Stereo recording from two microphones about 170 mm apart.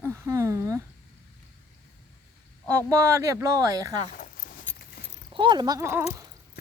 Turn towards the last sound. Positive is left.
turn(degrees=-15)  # may be behind; listen again after turning